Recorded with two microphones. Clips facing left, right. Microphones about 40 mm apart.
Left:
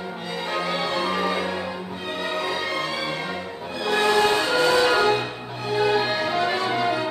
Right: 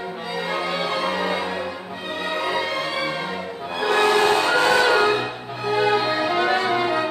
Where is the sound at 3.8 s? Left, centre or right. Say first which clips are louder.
Right 2 dB; right.